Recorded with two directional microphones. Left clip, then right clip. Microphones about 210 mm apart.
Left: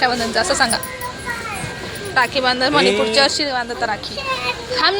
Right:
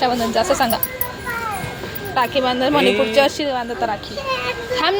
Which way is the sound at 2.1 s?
15° right (ahead or behind).